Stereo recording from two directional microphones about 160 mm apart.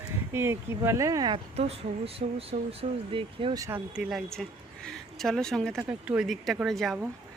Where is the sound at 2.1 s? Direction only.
35° right (ahead or behind).